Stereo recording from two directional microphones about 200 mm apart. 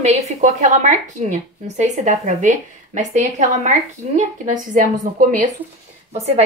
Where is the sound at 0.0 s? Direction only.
35° right (ahead or behind).